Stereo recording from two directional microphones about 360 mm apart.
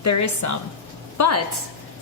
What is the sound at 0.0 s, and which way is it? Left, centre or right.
A woman's voice, left.